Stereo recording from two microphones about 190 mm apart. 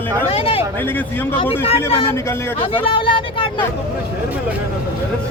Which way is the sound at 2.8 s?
25° left (ahead or behind).